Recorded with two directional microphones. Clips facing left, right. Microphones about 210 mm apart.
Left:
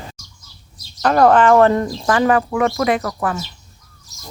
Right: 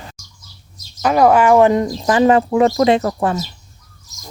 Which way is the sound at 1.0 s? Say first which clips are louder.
Even; 10° right (ahead or behind).